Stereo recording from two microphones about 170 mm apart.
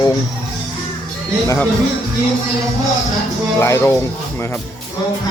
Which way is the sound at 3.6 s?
15° left (ahead or behind).